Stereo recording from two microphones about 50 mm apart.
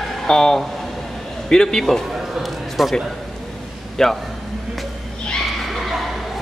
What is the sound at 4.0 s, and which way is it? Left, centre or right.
Speech, centre.